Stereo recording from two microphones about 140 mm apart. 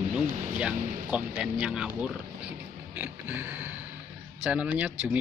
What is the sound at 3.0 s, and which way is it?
Speech, 10° right (ahead or behind).